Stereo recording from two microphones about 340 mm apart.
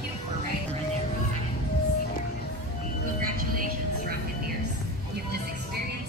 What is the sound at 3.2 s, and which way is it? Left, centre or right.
Music, right.